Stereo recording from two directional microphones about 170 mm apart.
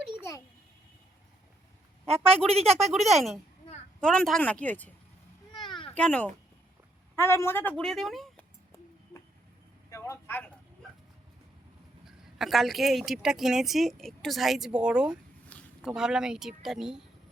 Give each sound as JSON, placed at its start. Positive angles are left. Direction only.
{"t": 2.0, "sound": "speech", "side_deg": -35}
{"t": 4.0, "sound": "a woman's voice", "side_deg": 5}
{"t": 5.5, "sound": "a sound", "side_deg": 30}
{"t": 6.0, "sound": "a woman's voice", "side_deg": 5}
{"t": 9.9, "sound": "a sound", "side_deg": 15}
{"t": 12.0, "sound": "a woman's voice", "side_deg": 0}